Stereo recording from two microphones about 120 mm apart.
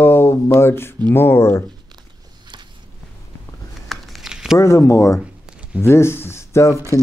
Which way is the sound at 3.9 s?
Centre (ahead or behind).